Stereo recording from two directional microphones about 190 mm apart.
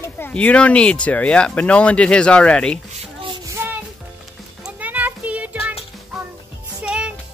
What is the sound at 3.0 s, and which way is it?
Child singing, 25° right (ahead or behind).